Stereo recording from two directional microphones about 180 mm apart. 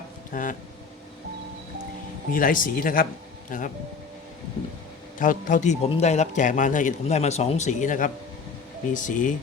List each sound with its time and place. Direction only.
0.3 s speech: 45° left (ahead or behind)
2.3 s speech: 50° left (ahead or behind)
5.2 s a man's voice: 45° left (ahead or behind)